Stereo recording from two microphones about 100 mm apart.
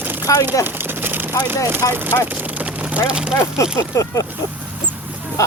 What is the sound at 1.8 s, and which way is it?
Speech, 35° left (ahead or behind).